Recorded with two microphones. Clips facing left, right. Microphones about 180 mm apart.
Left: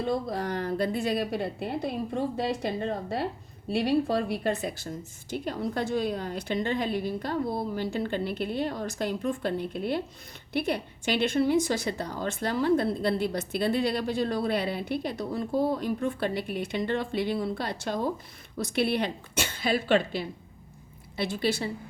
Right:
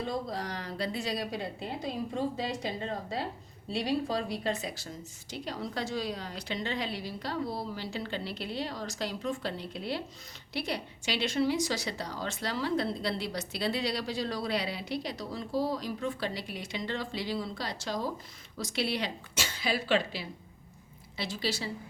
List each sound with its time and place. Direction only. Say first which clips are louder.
0.1 s a woman's voice: left 6 dB; 55° left (ahead or behind)